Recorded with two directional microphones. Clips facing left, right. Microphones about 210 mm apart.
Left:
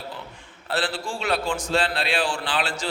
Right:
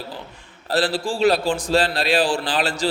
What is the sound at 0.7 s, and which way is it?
A man's voice, 35° right (ahead or behind).